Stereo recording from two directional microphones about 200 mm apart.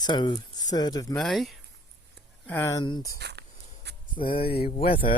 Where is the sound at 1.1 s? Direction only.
Centre (ahead or behind).